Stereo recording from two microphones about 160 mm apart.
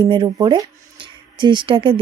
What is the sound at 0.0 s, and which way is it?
A woman's voice, 30° right (ahead or behind).